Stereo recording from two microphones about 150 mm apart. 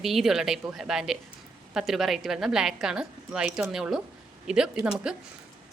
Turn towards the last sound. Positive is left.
turn(degrees=-5)  # may be behind; listen again after turning